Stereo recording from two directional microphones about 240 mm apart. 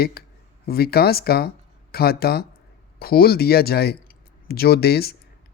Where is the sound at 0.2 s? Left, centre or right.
Left.